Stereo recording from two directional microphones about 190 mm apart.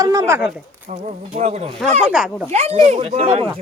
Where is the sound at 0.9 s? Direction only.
40° right (ahead or behind).